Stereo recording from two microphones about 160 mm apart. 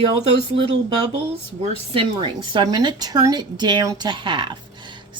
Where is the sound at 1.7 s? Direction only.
35° right (ahead or behind).